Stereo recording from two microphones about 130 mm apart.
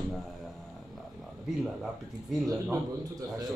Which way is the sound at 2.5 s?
25° right (ahead or behind).